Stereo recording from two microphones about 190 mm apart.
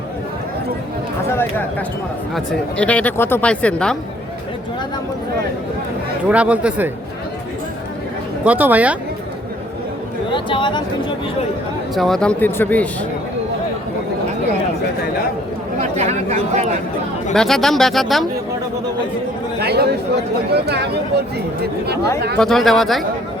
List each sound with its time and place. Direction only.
1.3 s a sound: 10° left (ahead or behind)
2.3 s speech: 5° left (ahead or behind)
6.2 s speech: 5° right (ahead or behind)
8.4 s speech: 10° right (ahead or behind)
10.3 s speech: 25° left (ahead or behind)
11.9 s speech: centre (ahead or behind)
15.8 s speech: 35° right (ahead or behind)
17.3 s speech: centre (ahead or behind)
19.5 s chatter: 55° right (ahead or behind)
20.5 s speech: 60° right (ahead or behind)
22.4 s speech: centre (ahead or behind)